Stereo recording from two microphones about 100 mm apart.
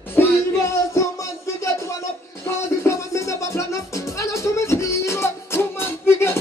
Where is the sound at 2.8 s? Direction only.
30° left (ahead or behind).